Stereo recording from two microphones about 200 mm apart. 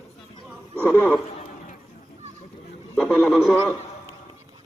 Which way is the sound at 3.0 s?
5° left (ahead or behind).